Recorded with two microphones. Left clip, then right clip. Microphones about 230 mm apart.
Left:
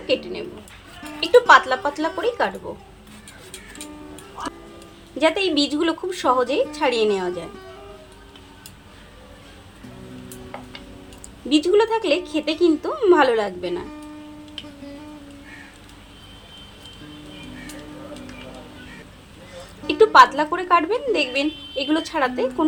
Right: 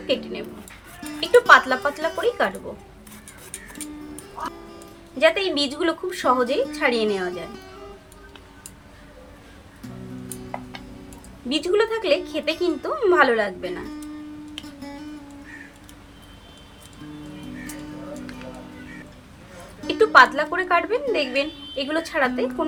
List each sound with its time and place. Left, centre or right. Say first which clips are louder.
1.2 s speech: left 1 dB; left
5.2 s a woman's voice: even; left
11.4 s a woman's voice: left 4 dB; left
19.9 s a woman's voice: left 2 dB; left